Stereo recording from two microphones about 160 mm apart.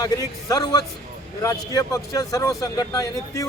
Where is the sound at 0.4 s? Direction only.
25° left (ahead or behind).